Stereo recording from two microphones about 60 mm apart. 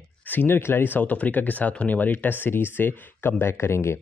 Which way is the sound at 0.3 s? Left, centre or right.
Left.